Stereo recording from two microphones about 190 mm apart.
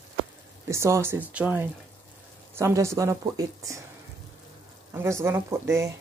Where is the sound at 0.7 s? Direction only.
15° right (ahead or behind).